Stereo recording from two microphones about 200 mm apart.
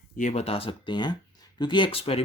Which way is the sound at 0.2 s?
35° left (ahead or behind).